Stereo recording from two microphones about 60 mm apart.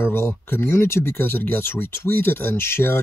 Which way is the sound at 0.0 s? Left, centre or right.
Left.